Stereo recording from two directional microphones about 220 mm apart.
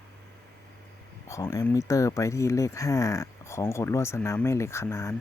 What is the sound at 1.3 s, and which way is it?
Speech, 15° left (ahead or behind).